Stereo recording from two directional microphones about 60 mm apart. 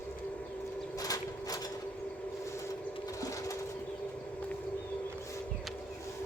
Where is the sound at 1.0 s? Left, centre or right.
Left.